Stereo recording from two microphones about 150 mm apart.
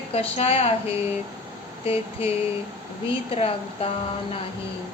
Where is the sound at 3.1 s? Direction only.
40° left (ahead or behind).